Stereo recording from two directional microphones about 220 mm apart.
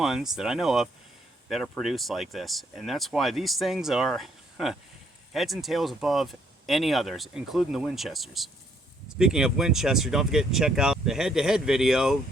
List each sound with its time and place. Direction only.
0.0 s speech: centre (ahead or behind)